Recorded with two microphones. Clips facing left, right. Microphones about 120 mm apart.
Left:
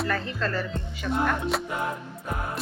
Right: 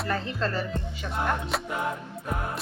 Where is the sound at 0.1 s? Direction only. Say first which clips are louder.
Even; 25° right (ahead or behind).